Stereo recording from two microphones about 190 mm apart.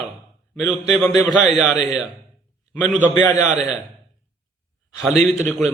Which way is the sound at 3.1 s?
15° left (ahead or behind).